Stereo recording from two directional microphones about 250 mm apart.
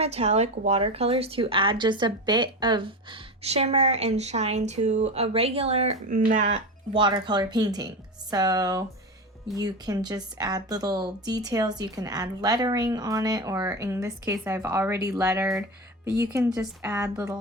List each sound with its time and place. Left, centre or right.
0.0 s a woman's voice: right
6.9 s speech: centre